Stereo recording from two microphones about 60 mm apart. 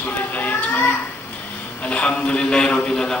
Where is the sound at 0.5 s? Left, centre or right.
Left.